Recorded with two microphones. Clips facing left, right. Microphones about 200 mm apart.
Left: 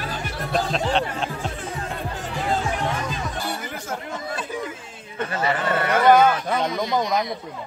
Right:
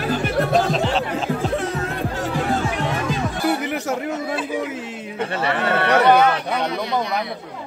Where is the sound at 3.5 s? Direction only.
75° right (ahead or behind).